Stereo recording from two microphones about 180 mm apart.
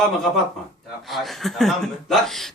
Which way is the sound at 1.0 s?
Centre (ahead or behind).